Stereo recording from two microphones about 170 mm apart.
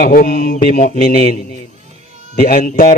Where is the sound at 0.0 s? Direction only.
55° left (ahead or behind).